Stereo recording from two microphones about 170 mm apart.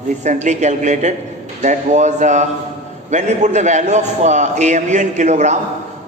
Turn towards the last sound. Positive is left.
turn(degrees=-45)  # may be behind; listen again after turning